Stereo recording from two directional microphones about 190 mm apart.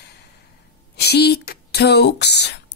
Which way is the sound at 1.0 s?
60° left (ahead or behind).